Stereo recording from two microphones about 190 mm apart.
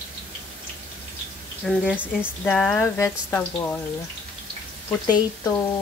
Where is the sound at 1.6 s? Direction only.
10° left (ahead or behind).